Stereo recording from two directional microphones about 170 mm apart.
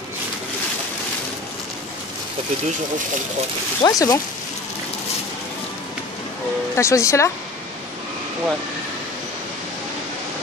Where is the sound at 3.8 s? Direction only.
20° left (ahead or behind).